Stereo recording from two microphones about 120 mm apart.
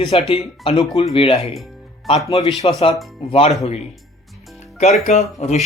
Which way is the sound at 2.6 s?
50° left (ahead or behind).